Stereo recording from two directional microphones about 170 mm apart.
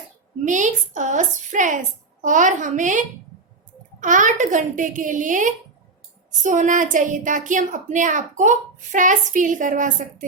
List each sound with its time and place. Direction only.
0.4 s a woman's voice: 45° right (ahead or behind)
4.0 s a woman's voice: 50° right (ahead or behind)